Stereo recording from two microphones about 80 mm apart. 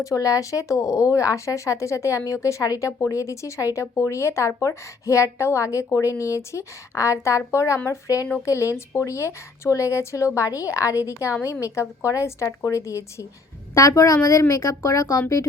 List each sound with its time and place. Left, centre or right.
0.0 s speech: left